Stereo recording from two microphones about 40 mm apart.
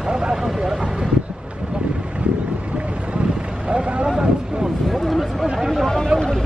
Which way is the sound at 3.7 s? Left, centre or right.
Right.